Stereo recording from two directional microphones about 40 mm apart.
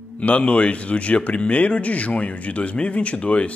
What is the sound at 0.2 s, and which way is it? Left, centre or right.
Speech, left.